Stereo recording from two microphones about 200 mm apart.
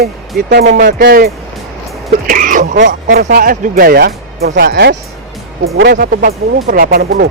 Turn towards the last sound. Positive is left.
turn(degrees=-50)  # may be behind; listen again after turning